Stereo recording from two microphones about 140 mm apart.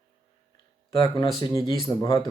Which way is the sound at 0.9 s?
35° left (ahead or behind).